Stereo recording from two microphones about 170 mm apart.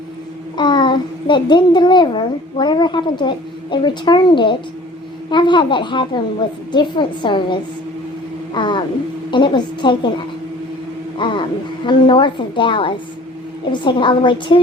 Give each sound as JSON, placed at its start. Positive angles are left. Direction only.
{"t": 0.5, "sound": "a child's voice", "side_deg": 25}
{"t": 11.2, "sound": "a child's voice", "side_deg": 30}